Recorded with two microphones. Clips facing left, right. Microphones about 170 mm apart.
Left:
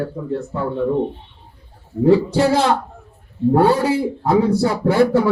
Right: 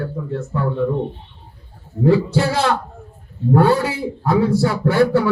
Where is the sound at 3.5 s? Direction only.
25° left (ahead or behind).